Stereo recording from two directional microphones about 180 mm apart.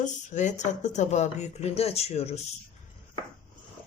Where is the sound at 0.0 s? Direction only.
45° left (ahead or behind).